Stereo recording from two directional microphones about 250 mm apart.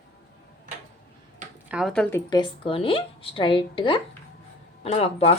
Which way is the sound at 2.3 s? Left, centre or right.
Centre.